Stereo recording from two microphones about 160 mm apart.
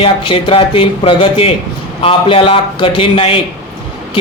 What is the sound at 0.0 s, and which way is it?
Speech, 35° left (ahead or behind).